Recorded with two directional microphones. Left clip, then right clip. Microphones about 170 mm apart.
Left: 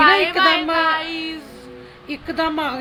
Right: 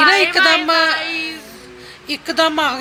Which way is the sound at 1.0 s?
75° left (ahead or behind).